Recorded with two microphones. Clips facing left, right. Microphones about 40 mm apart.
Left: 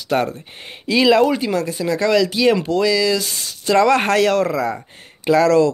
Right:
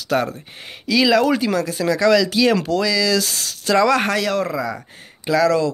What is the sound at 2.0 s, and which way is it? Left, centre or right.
Speech, left.